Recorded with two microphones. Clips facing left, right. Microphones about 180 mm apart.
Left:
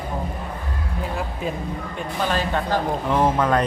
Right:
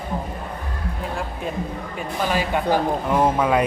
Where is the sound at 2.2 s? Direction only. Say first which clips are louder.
Right 3 dB; 10° right (ahead or behind).